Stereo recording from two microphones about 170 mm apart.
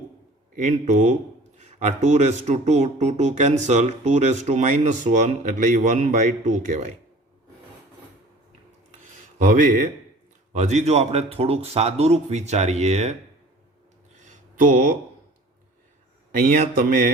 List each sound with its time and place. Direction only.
0.5 s speech: 45° right (ahead or behind)
9.4 s speech: 50° right (ahead or behind)
14.5 s speech: 50° right (ahead or behind)
16.4 s speech: 55° right (ahead or behind)